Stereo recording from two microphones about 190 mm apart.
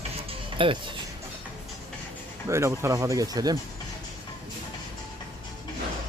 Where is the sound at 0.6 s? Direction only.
25° right (ahead or behind).